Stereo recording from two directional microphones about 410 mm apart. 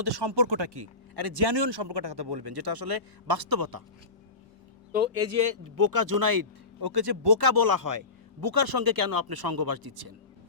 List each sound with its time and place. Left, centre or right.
0.0 s speech: right
1.1 s speech: right
4.9 s speech: right
5.1 s speech: right